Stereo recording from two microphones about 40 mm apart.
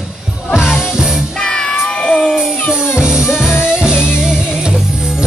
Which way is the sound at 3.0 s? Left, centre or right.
Centre.